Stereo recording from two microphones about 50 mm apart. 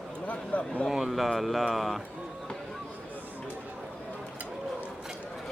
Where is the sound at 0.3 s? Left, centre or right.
Left.